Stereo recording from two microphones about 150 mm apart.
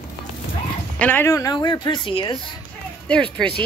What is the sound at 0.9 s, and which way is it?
A woman's voice, 10° left (ahead or behind).